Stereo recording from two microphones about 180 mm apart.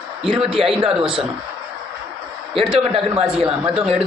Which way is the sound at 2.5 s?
30° right (ahead or behind).